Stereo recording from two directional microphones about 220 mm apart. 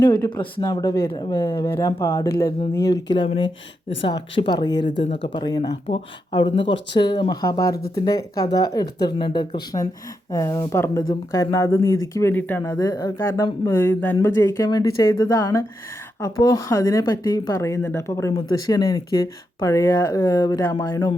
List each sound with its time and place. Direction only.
0.0 s speech: 20° left (ahead or behind)